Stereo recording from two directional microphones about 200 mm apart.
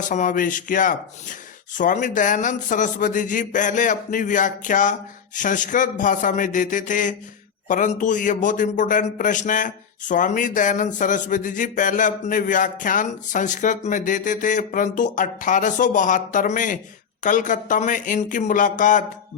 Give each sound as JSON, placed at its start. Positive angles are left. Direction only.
{"t": 0.1, "sound": "a man's voice", "side_deg": 40}